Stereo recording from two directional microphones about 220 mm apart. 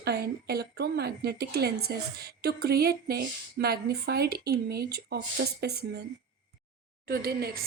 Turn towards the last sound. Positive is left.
turn(degrees=-45)  # may be behind; listen again after turning